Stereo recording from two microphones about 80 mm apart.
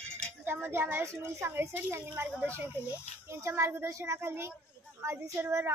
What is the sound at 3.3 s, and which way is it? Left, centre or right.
A child's voice, right.